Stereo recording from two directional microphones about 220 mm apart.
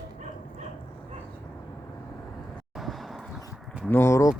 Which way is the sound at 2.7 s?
Centre (ahead or behind).